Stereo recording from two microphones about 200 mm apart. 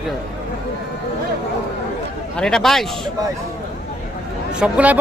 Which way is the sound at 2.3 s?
5° left (ahead or behind).